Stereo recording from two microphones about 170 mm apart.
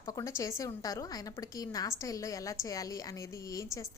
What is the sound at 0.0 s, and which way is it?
A woman's voice, 20° left (ahead or behind).